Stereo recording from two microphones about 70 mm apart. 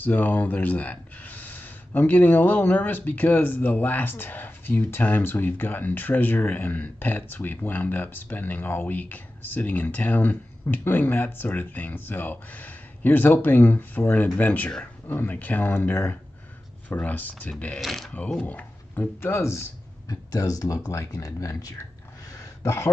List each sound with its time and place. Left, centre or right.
0.0 s speech: left
17.7 s speech: centre
18.4 s speech: left
19.3 s speech: left
20.1 s speech: left
22.3 s a sound: left